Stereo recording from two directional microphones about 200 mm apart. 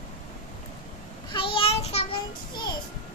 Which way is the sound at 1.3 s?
25° left (ahead or behind).